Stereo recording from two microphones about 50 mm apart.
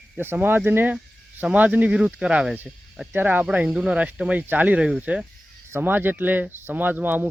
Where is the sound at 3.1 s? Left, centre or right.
Right.